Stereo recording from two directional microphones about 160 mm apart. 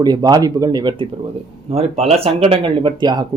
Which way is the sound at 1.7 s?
40° right (ahead or behind).